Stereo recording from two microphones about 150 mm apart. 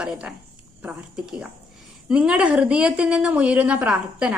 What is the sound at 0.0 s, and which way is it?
A woman's voice, 5° right (ahead or behind).